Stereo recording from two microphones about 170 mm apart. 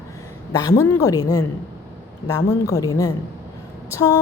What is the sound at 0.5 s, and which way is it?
A woman's voice, 20° left (ahead or behind).